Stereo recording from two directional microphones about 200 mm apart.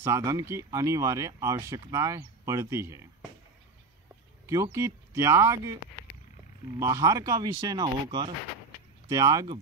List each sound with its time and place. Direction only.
0.0 s speech: 15° right (ahead or behind)
4.5 s speech: 15° right (ahead or behind)
6.8 s speech: 15° right (ahead or behind)